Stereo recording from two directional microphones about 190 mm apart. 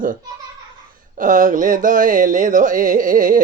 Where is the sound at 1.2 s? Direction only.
45° right (ahead or behind).